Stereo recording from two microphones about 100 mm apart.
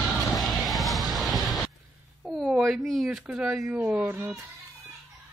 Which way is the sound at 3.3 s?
10° right (ahead or behind).